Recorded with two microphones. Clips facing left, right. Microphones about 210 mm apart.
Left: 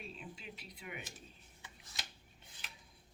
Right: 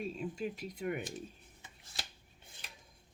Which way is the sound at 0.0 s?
45° right (ahead or behind).